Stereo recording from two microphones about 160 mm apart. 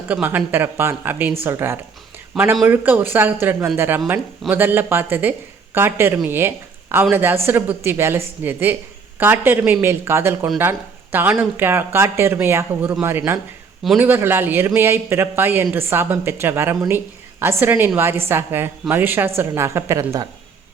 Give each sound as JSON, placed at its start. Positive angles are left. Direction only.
{"t": 0.1, "sound": "speech", "side_deg": -10}